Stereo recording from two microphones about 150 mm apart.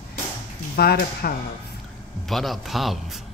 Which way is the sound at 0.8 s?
85° left.